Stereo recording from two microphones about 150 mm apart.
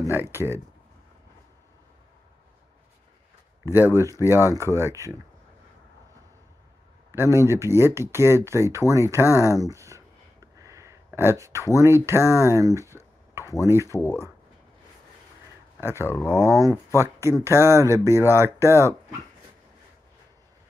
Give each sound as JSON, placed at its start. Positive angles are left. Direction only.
{"t": 0.0, "sound": "speech", "side_deg": -15}
{"t": 3.9, "sound": "speech", "side_deg": -20}
{"t": 7.1, "sound": "speech", "side_deg": -20}
{"t": 13.4, "sound": "a sound", "side_deg": 20}
{"t": 13.7, "sound": "speech", "side_deg": -20}
{"t": 13.9, "sound": "speech", "side_deg": 20}
{"t": 15.8, "sound": "speech", "side_deg": -15}
{"t": 16.1, "sound": "speech", "side_deg": 20}
{"t": 16.4, "sound": "speech", "side_deg": -20}